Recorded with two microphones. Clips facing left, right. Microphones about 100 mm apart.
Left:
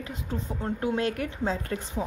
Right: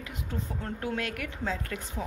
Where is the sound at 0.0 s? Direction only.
30° left (ahead or behind).